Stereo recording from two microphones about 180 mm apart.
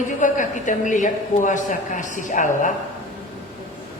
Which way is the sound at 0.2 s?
45° left (ahead or behind).